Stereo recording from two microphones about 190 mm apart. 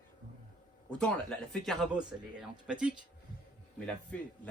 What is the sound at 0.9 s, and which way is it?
A man's voice, 5° left (ahead or behind).